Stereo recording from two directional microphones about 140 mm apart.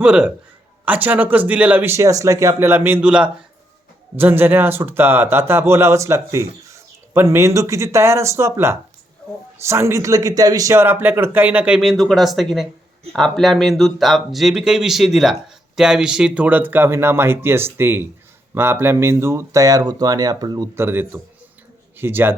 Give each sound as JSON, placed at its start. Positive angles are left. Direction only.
{"t": 0.0, "sound": "a man's voice", "side_deg": -5}
{"t": 20.7, "sound": "a man's voice", "side_deg": -15}